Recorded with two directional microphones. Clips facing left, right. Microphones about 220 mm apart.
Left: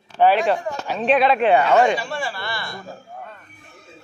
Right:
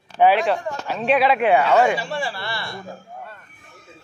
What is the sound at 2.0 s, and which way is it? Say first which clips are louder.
Speech: right 1 dB; 30° right (ahead or behind).